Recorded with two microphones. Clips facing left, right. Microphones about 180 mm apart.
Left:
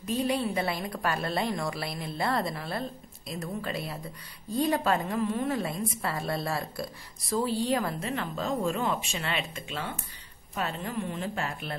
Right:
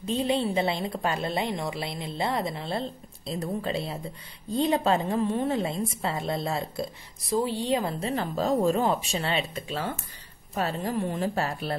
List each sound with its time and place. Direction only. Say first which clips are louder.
0.0 s a woman's voice: right 2 dB; 25° right (ahead or behind)